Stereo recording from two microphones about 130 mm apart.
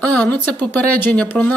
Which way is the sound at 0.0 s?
10° left (ahead or behind).